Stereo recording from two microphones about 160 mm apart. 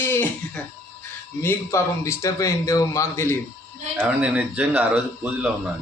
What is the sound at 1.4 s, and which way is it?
A man's voice, 15° left (ahead or behind).